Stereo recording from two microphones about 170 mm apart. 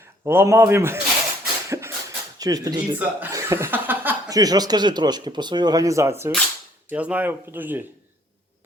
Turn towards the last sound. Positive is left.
turn(degrees=-10)  # may be behind; listen again after turning